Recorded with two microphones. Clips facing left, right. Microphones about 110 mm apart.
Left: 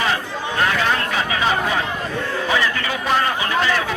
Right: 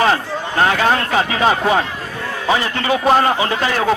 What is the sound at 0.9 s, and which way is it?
Speech, 40° right (ahead or behind).